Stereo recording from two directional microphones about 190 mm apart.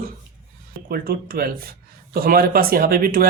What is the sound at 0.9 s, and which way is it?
Speech, 50° right (ahead or behind).